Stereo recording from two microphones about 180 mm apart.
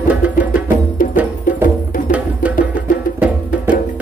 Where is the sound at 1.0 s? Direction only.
50° left (ahead or behind).